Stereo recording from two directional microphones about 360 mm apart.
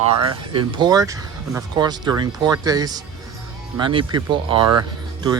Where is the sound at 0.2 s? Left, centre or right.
Centre.